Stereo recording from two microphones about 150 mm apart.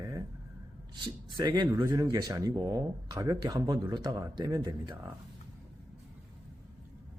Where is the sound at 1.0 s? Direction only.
30° right (ahead or behind).